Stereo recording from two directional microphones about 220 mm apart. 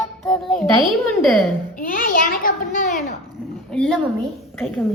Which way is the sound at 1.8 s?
40° left (ahead or behind).